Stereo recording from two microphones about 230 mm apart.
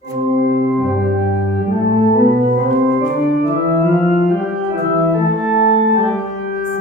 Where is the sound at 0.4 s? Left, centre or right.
Left.